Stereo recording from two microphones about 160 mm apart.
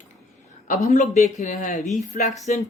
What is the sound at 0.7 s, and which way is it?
Speech, 50° left (ahead or behind).